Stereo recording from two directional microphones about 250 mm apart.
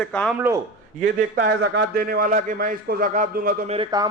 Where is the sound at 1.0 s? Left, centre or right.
Right.